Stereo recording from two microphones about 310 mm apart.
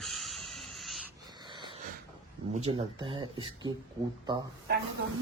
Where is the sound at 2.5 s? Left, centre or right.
Centre.